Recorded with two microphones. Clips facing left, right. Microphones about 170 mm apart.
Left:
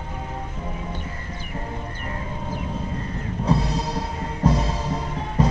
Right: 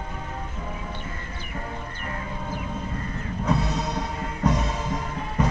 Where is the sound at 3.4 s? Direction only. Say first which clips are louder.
Left 2 dB; 30° left (ahead or behind).